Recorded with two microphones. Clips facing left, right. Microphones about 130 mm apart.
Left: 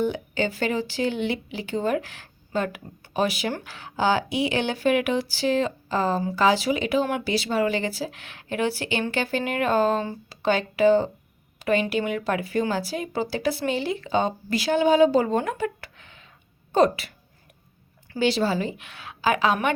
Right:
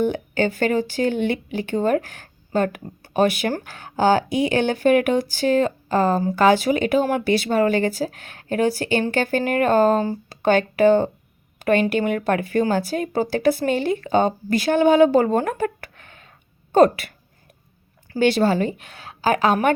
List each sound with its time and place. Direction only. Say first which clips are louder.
0.0 s speech: right 4 dB; 50° right (ahead or behind)
18.2 s speech: right 5 dB; 55° right (ahead or behind)